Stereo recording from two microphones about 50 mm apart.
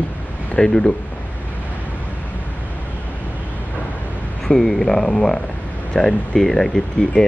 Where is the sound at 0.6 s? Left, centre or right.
Centre.